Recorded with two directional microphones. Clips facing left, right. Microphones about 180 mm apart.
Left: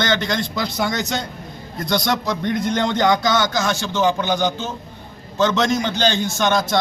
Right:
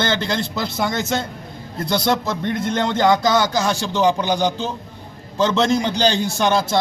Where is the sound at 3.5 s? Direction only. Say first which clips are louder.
Right 1 dB; 35° right (ahead or behind).